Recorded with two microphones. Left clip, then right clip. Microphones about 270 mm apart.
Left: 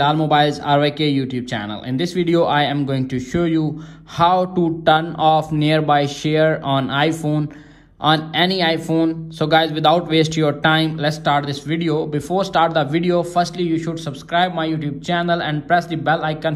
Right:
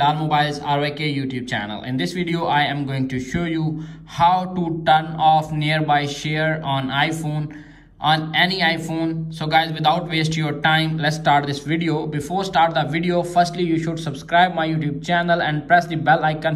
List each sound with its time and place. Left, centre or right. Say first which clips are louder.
0.0 s speech: left 3 dB; left